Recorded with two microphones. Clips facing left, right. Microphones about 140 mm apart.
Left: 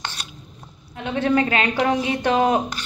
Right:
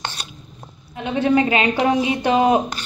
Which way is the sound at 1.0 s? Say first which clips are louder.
Right 2 dB; 10° right (ahead or behind).